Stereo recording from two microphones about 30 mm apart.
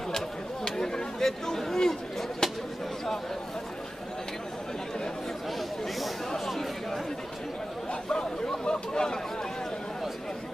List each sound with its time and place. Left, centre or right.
0.7 s chatter: left
5.6 s chatter: centre
7.9 s chatter: left
8.6 s a sound: left